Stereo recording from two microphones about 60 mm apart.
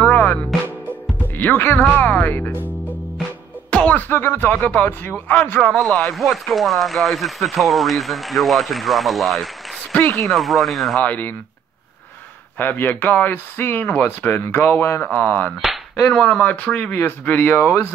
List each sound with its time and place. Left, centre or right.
0.0 s music: left
1.4 s speech: left
3.7 s music: left
4.1 s speech: left
4.6 s speech: left
5.7 s speech: centre
6.1 s speech: centre
11.0 s speech: left
12.5 s speech: left
15.0 s speech: left
16.1 s speech: centre; by 17.6 s left